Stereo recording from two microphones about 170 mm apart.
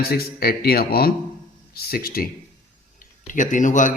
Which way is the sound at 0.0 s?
65° left (ahead or behind).